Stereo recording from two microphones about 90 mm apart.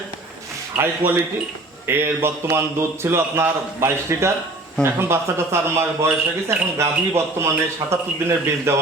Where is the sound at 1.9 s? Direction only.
25° right (ahead or behind).